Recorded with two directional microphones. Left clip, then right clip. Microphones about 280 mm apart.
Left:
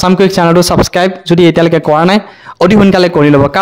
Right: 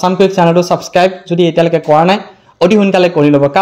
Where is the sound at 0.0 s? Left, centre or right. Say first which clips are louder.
Left 1 dB; left.